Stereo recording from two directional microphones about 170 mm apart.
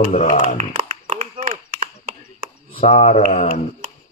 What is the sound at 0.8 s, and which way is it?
Clapping, 45° right (ahead or behind).